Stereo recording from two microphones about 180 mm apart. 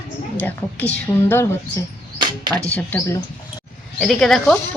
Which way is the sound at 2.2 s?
25° right (ahead or behind).